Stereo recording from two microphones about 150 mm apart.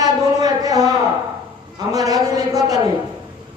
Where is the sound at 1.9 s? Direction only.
25° right (ahead or behind).